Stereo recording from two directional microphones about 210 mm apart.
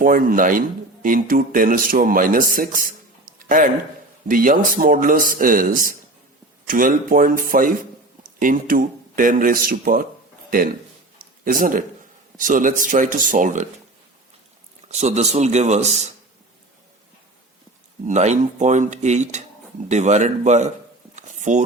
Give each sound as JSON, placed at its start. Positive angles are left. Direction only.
{"t": 0.0, "sound": "speech", "side_deg": -40}
{"t": 3.3, "sound": "a sound", "side_deg": -40}
{"t": 4.3, "sound": "speech", "side_deg": -40}
{"t": 11.4, "sound": "speech", "side_deg": -40}
{"t": 14.8, "sound": "speech", "side_deg": -35}
{"t": 18.0, "sound": "speech", "side_deg": -35}
{"t": 21.2, "sound": "a sound", "side_deg": -35}